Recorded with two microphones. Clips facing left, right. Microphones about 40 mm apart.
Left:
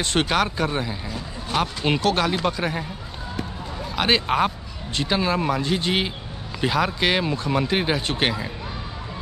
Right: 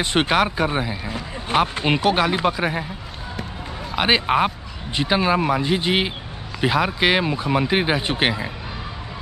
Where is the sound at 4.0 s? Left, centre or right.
Centre.